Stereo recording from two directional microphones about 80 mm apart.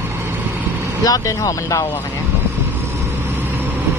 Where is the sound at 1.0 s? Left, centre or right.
Left.